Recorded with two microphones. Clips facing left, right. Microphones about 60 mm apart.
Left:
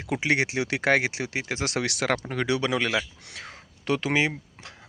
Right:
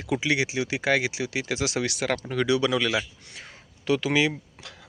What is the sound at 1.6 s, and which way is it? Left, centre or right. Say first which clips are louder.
Speech: left 2 dB; left.